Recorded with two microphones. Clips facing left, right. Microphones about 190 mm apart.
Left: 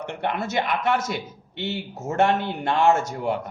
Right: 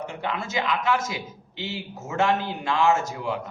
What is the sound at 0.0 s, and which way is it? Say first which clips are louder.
A man's voice: left 3 dB; 65° left (ahead or behind).